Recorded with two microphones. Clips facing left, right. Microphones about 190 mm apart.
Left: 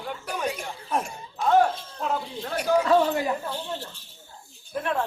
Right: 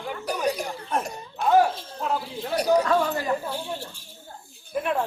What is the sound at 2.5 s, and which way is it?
Speech, 40° right (ahead or behind).